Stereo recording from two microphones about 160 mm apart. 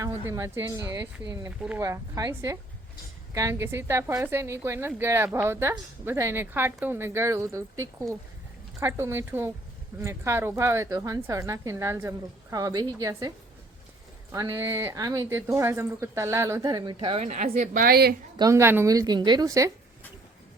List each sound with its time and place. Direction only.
0.0 s a woman's voice: 20° right (ahead or behind)
14.3 s a woman's voice: 20° right (ahead or behind); by 17.2 s 35° right (ahead or behind)
17.2 s a woman's voice: 45° right (ahead or behind)
17.7 s a woman's voice: 75° right (ahead or behind)
18.3 s a woman's voice: 20° right (ahead or behind)